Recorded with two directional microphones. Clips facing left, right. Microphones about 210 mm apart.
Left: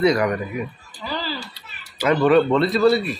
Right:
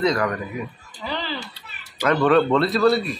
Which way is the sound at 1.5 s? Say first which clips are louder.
Even; 10° left (ahead or behind).